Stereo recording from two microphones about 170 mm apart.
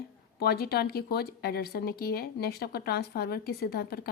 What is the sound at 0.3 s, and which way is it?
A woman's voice, 70° left (ahead or behind).